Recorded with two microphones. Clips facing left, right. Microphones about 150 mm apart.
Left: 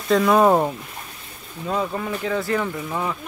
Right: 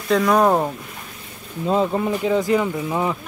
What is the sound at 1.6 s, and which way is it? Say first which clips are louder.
Speech: right 5 dB; 25° right (ahead or behind).